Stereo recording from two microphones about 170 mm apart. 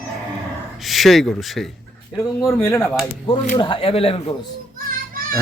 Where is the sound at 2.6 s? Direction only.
15° left (ahead or behind).